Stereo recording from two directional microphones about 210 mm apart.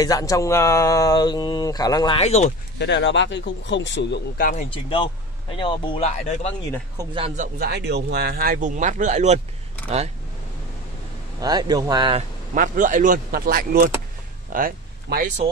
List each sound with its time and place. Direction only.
0.0 s speech: 15° left (ahead or behind); by 2.5 s 30° left (ahead or behind)
2.8 s speech: 55° left (ahead or behind)
4.5 s speech: 30° left (ahead or behind)
7.0 s speech: 25° right (ahead or behind)
7.5 s speech: 50° right (ahead or behind); by 9.4 s 30° right (ahead or behind)
11.4 s speech: 20° right (ahead or behind)
12.5 s speech: 40° right (ahead or behind)